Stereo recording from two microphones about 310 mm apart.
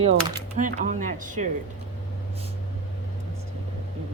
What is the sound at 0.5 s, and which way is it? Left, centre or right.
Speech, right.